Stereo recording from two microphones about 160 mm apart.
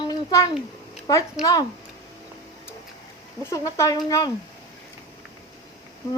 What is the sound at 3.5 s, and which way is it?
Speech, 20° left (ahead or behind).